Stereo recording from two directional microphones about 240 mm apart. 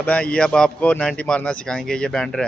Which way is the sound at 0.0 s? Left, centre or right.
Centre.